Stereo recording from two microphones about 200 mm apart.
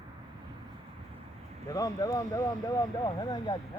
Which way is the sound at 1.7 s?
20° left (ahead or behind).